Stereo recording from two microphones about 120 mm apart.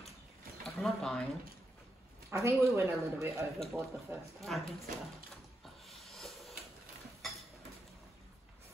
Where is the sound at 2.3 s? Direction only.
25° right (ahead or behind).